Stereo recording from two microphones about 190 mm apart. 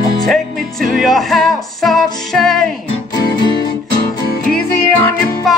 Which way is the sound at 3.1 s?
25° left (ahead or behind).